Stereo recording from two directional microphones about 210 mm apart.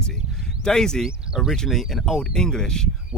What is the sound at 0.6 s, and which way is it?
Speech, 5° left (ahead or behind).